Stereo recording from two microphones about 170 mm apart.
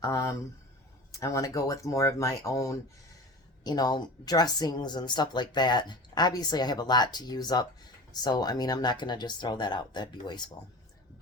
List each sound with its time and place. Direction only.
0.0 s speech: 20° left (ahead or behind)